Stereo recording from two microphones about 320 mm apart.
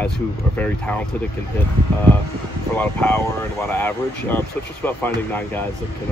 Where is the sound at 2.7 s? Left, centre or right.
Centre.